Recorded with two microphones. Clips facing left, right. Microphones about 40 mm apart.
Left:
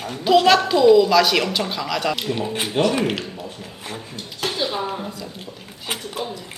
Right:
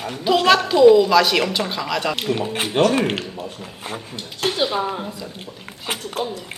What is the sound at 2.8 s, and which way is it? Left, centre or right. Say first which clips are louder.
Speech: right 3 dB; right.